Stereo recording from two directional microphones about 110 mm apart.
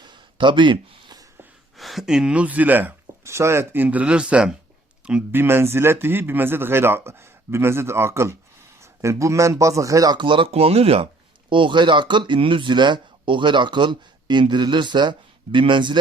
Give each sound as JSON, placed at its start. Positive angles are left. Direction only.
{"t": 0.0, "sound": "a sound", "side_deg": -45}
{"t": 1.7, "sound": "speech", "side_deg": 0}
{"t": 5.4, "sound": "a man's voice", "side_deg": -20}